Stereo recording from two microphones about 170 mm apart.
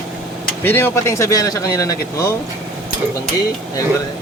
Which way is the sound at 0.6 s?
10° left (ahead or behind).